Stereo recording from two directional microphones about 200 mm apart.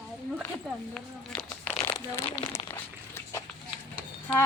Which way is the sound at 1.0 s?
5° left (ahead or behind).